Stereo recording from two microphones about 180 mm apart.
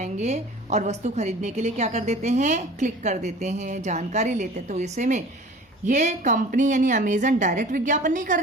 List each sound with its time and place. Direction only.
0.0 s a woman's voice: 40° right (ahead or behind)